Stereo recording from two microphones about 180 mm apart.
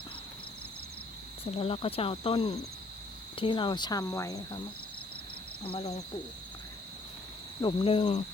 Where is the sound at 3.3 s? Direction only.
25° left (ahead or behind).